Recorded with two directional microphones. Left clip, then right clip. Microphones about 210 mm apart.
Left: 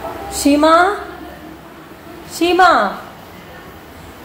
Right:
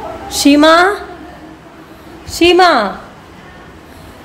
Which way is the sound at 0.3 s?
30° right (ahead or behind).